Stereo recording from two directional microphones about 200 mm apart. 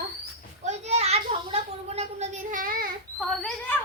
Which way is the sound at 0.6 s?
35° right (ahead or behind).